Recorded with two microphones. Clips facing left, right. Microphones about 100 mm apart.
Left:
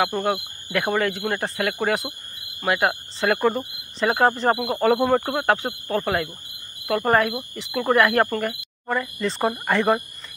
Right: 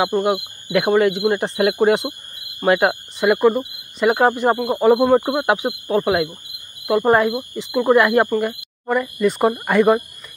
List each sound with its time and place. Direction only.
0.0 s speech: 15° right (ahead or behind)
3.2 s speech: 5° right (ahead or behind)